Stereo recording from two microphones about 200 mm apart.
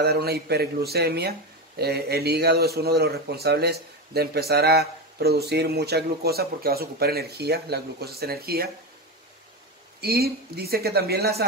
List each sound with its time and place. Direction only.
0.0 s a man's voice: 55° right (ahead or behind)
9.9 s a man's voice: 50° right (ahead or behind)